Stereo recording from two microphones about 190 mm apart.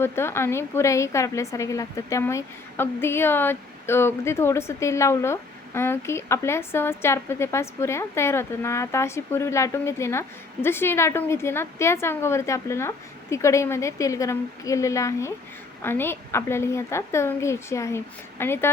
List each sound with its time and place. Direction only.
0.0 s a woman's voice: 15° left (ahead or behind)